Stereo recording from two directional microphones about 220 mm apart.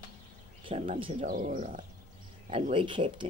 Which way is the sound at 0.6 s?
30° right (ahead or behind).